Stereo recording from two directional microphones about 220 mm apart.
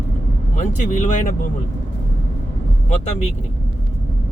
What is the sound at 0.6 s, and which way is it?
Speech, 35° left (ahead or behind).